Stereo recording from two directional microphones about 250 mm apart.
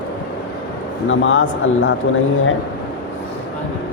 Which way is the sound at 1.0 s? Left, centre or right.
Left.